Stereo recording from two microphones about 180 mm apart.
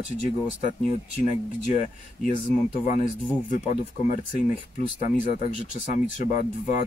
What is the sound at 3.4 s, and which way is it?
Speech, 45° left (ahead or behind).